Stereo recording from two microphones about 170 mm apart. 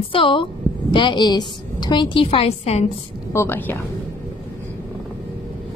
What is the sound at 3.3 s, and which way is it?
Speech, 15° left (ahead or behind).